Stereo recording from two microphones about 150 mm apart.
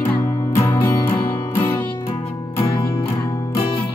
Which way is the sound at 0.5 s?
20° left (ahead or behind).